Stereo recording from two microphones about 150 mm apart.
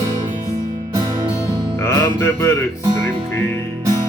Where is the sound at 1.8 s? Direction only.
20° left (ahead or behind).